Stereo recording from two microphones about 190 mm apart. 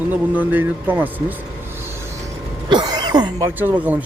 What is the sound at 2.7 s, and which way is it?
Speech, 20° right (ahead or behind).